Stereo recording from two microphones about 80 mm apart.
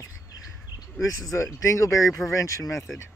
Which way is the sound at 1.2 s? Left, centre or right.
Left.